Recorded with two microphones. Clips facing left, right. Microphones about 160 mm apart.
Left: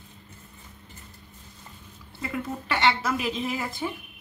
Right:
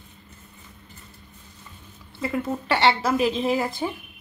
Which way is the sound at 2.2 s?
30° right (ahead or behind).